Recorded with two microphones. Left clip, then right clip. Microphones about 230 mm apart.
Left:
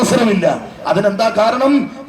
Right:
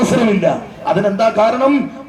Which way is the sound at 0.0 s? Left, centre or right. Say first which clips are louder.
Left 1 dB; left.